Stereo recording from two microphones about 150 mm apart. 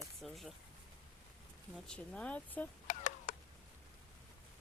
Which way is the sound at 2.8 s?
55° left (ahead or behind).